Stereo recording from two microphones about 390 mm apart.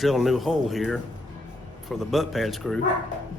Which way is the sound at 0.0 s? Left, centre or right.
Centre.